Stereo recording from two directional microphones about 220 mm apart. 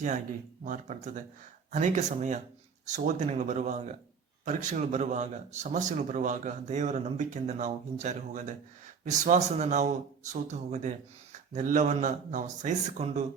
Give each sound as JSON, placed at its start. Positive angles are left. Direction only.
{"t": 0.6, "sound": "a man's voice", "side_deg": -35}